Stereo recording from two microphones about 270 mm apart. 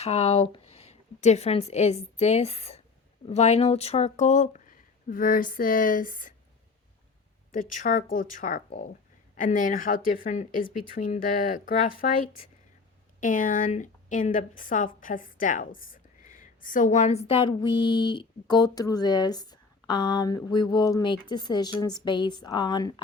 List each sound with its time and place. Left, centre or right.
0.0 s a woman's voice: left
7.5 s a woman's voice: left